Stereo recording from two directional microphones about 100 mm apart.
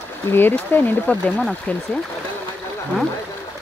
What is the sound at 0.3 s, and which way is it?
Speech, 20° left (ahead or behind).